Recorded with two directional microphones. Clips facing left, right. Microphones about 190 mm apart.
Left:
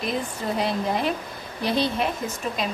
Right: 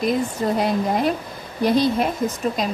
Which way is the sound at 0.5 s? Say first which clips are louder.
Right 3 dB; 45° right (ahead or behind).